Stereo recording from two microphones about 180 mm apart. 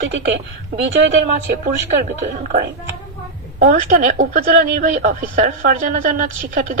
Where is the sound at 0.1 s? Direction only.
80° right.